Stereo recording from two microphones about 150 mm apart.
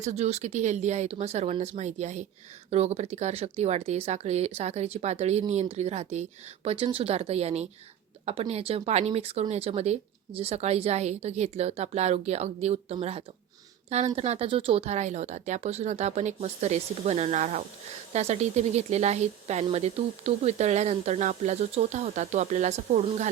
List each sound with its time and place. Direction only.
0.0 s speech: 50° right (ahead or behind)